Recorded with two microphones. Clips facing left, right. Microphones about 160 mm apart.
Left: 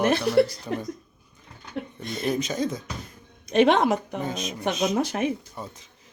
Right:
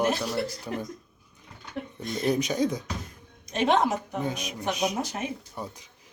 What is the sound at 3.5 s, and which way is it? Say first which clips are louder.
Speech: left 5 dB; 70° left (ahead or behind).